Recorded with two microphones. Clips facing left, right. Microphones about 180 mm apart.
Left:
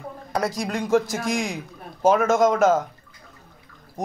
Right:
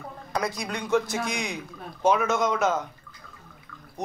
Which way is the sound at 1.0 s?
90° left.